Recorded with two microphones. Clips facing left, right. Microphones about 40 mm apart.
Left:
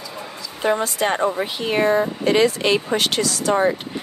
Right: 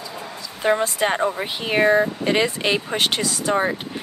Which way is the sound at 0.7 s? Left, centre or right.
Centre.